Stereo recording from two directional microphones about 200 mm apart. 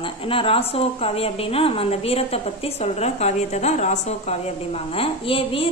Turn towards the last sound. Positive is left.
turn(degrees=30)  # may be behind; listen again after turning